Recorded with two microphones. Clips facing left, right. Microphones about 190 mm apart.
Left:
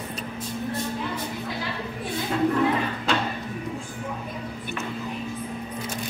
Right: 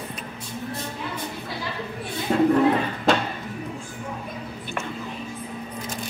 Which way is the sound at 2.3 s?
45° right (ahead or behind).